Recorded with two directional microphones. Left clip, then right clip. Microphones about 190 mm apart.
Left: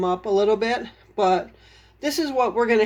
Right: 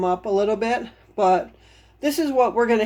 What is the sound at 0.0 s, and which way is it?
Speech, 5° right (ahead or behind).